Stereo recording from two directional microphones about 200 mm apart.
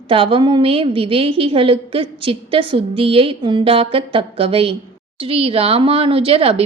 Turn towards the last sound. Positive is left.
turn(degrees=-30)  # may be behind; listen again after turning